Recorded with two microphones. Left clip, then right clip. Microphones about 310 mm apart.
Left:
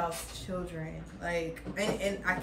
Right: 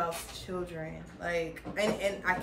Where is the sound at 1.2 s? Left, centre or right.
Centre.